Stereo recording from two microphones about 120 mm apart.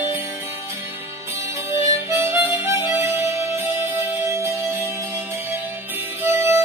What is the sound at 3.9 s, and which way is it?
Music, 25° right (ahead or behind).